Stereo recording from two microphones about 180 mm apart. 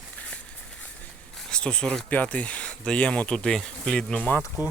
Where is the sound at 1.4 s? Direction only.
5° left (ahead or behind).